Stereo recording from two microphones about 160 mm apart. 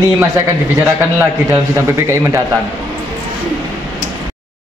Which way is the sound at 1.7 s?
20° right (ahead or behind).